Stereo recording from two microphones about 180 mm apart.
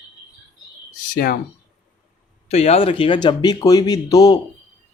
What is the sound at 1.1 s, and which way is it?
Speech, 55° left (ahead or behind).